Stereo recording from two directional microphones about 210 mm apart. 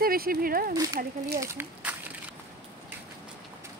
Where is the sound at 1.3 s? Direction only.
10° right (ahead or behind).